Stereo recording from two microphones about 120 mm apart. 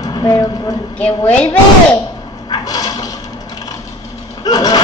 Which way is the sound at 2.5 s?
30° left (ahead or behind).